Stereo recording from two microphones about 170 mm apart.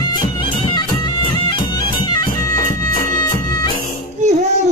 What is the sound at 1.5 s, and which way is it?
Music, 25° left (ahead or behind).